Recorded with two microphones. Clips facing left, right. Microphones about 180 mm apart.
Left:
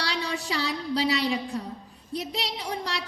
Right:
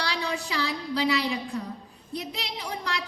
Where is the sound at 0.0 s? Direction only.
35° left (ahead or behind).